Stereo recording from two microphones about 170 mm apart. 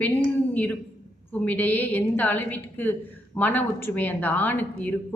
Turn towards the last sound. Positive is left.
turn(degrees=10)  # may be behind; listen again after turning